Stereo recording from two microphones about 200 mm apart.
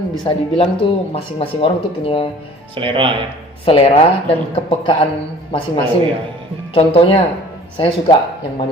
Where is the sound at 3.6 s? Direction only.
30° left (ahead or behind).